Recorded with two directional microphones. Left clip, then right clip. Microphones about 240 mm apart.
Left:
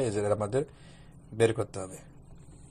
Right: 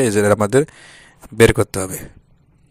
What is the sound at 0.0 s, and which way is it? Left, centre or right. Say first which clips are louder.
A man's voice: right 14 dB; right.